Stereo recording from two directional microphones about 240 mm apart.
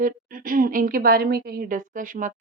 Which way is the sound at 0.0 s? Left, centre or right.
Right.